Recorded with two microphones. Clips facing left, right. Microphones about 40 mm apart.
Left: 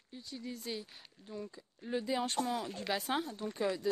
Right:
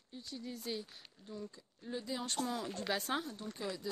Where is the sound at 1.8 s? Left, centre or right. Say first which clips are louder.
Left 6 dB; left.